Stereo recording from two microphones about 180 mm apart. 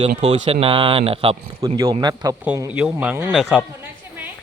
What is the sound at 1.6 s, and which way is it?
Speech, 20° right (ahead or behind).